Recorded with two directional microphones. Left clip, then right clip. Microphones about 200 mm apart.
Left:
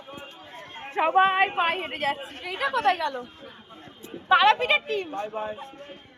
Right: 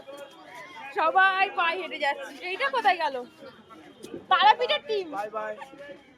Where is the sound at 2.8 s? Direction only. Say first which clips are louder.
Right 1 dB; 30° right (ahead or behind).